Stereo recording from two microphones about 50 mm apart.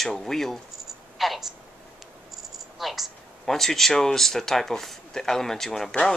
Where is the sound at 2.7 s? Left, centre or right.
Centre.